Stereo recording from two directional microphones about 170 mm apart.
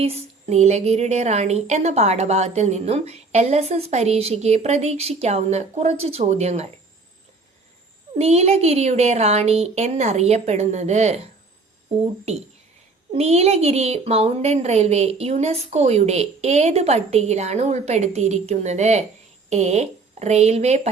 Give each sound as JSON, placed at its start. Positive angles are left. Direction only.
{"t": 0.0, "sound": "a woman's voice", "side_deg": -40}
{"t": 8.2, "sound": "a woman's voice", "side_deg": -40}
{"t": 13.1, "sound": "a woman's voice", "side_deg": -35}